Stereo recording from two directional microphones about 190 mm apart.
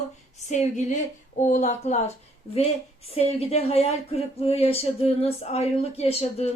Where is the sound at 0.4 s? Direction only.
40° left (ahead or behind).